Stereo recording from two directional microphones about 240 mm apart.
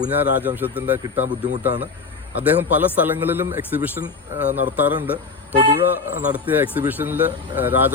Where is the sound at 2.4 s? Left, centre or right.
Centre.